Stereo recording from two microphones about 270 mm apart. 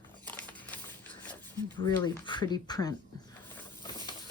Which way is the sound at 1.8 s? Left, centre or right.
Centre.